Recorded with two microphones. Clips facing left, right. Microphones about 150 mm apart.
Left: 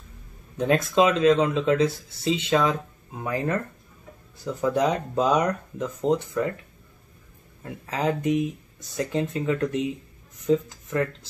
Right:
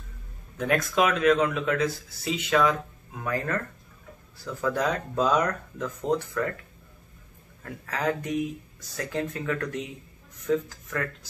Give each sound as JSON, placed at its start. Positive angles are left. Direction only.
{"t": 0.6, "sound": "speech", "side_deg": 25}
{"t": 7.6, "sound": "speech", "side_deg": 20}